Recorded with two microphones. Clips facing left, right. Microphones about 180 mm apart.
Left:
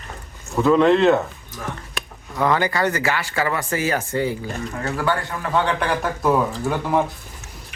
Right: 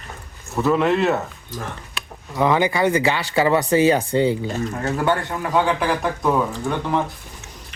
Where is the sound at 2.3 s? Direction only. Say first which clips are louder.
Right 2 dB; 15° right (ahead or behind).